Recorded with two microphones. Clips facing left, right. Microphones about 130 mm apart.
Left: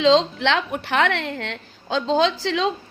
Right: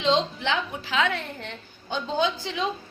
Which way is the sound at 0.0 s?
90° left.